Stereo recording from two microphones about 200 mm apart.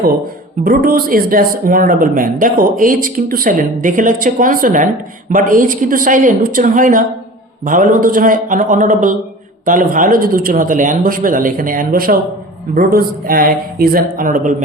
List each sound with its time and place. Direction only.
0.6 s a woman's voice: 45° right (ahead or behind)